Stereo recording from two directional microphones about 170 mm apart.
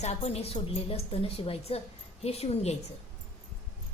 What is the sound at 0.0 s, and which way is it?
A woman's voice, 40° left (ahead or behind).